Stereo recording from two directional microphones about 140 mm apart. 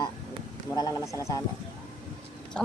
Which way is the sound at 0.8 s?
25° left (ahead or behind).